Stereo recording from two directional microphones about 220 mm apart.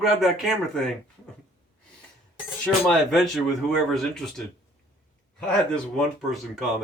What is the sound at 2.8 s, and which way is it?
A man's voice, centre (ahead or behind).